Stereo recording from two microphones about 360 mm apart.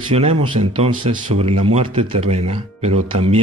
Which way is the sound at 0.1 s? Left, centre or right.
Centre.